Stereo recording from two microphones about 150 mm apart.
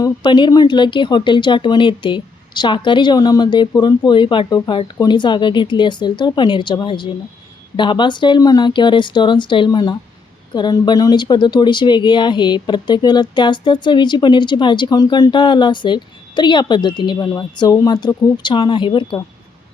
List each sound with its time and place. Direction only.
0.0 s speech: 30° left (ahead or behind)